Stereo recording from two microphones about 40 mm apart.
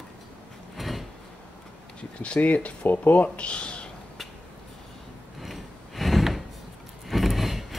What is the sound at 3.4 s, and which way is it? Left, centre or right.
Speech, left.